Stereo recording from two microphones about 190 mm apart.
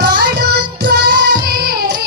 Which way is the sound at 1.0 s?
55° right (ahead or behind).